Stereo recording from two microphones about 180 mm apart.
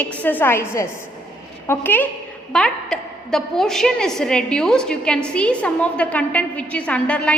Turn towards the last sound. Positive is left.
turn(degrees=5)  # may be behind; listen again after turning